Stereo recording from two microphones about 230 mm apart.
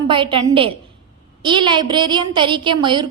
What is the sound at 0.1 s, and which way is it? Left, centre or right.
A woman's voice, right.